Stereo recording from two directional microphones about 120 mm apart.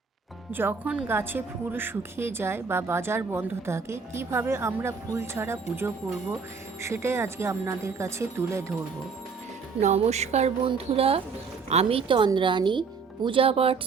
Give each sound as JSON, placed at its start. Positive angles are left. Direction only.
{"t": 0.5, "sound": "a woman's voice", "side_deg": -15}
{"t": 9.8, "sound": "speech", "side_deg": -65}
{"t": 10.7, "sound": "a woman's voice", "side_deg": -55}